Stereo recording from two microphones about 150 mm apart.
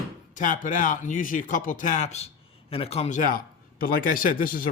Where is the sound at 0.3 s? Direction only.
60° left (ahead or behind).